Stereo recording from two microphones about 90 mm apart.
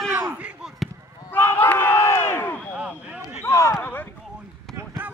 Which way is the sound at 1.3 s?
25° left (ahead or behind).